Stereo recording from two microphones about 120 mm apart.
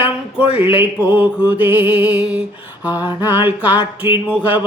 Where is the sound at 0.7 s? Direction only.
15° right (ahead or behind).